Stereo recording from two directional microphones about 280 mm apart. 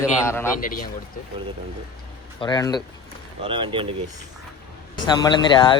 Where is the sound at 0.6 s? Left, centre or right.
Left.